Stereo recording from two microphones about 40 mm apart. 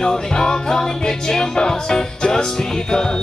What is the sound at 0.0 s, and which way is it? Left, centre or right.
Music, centre.